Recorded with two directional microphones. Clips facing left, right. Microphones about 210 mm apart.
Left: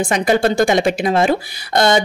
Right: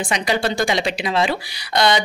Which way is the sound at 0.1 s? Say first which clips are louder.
Left 6 dB; 50° left (ahead or behind).